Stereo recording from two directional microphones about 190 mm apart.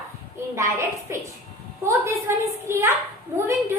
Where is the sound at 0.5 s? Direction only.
15° right (ahead or behind).